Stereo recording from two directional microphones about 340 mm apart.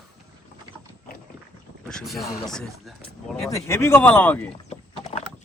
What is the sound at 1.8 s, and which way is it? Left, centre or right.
Speech, centre.